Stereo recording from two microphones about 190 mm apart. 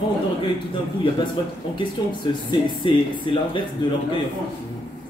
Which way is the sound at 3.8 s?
20° left (ahead or behind).